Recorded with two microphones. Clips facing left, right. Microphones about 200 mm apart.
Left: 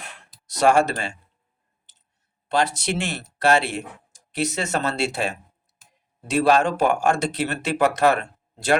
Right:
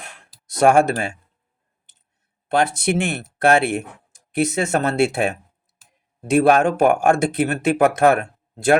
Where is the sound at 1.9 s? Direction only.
55° right (ahead or behind).